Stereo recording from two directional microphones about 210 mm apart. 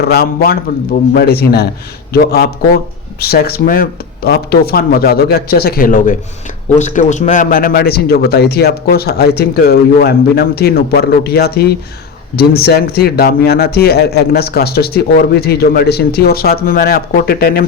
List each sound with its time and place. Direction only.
0.0 s a man's voice: 50° left (ahead or behind)